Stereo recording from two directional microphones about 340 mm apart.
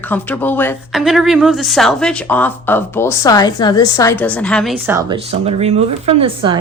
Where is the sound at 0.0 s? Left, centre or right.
Centre.